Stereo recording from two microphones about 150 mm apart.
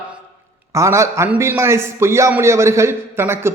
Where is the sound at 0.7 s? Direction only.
20° right (ahead or behind).